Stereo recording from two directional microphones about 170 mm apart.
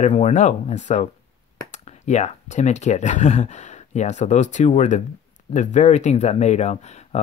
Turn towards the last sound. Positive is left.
turn(degrees=40)  # may be behind; listen again after turning